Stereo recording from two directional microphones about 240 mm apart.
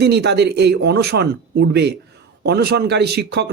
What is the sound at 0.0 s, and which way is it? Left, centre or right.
A man's voice, right.